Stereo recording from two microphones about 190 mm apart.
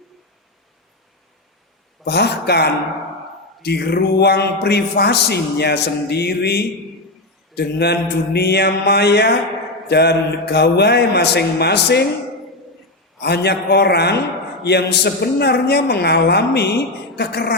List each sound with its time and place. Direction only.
2.0 s speech: 60° left (ahead or behind)
13.2 s speech: 60° left (ahead or behind)